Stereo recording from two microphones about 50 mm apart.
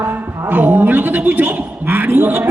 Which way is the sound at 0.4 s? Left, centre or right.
Right.